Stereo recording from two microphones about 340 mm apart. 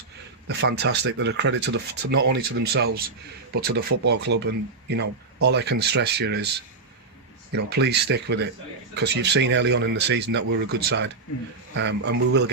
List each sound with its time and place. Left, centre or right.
0.4 s speech: right
7.5 s speech: right